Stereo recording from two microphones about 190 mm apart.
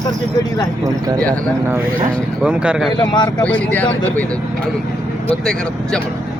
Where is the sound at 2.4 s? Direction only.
5° right (ahead or behind).